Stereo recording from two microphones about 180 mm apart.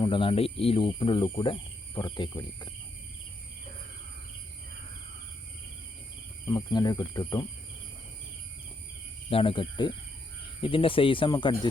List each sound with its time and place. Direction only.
0.0 s speech: 30° left (ahead or behind)
6.5 s speech: 20° left (ahead or behind)
9.3 s speech: 30° left (ahead or behind)